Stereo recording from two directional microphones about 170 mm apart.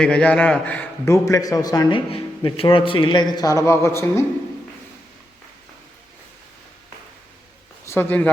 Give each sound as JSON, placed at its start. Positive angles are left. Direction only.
{"t": 0.0, "sound": "a man's voice", "side_deg": 5}
{"t": 7.9, "sound": "speech", "side_deg": 10}